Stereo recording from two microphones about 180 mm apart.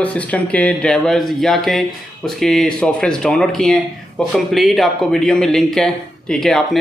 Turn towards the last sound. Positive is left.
turn(degrees=0)  # may be behind; listen again after turning